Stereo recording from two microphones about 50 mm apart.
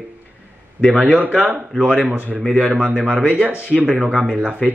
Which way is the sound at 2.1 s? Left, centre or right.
Right.